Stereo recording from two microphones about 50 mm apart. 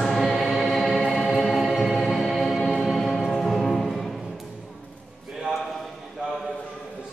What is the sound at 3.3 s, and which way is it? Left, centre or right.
Music, centre.